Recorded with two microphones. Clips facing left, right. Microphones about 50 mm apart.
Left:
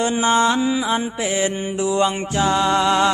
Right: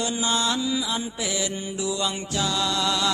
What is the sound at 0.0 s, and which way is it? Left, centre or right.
Mantra, left.